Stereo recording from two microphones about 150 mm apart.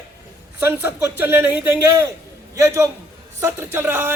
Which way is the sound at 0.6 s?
15° right (ahead or behind).